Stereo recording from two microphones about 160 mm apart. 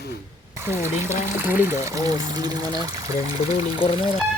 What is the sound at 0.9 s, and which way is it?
Speech, 15° right (ahead or behind).